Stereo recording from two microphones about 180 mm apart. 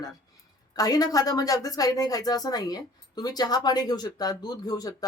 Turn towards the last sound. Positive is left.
turn(degrees=20)  # may be behind; listen again after turning